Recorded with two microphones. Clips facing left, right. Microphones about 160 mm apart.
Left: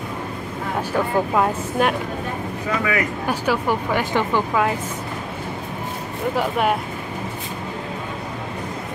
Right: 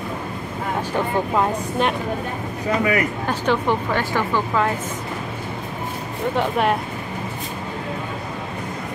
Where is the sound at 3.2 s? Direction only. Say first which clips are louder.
Left 1 dB; 10° left (ahead or behind).